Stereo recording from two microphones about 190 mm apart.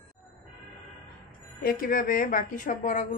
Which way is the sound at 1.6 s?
50° left (ahead or behind).